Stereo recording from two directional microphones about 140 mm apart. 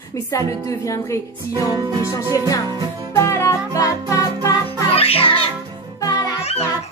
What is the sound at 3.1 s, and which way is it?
Music, 20° left (ahead or behind).